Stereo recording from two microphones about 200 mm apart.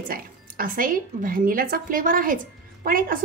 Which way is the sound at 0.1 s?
45° right (ahead or behind).